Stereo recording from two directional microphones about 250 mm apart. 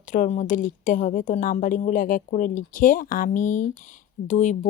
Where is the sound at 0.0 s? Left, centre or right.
Left.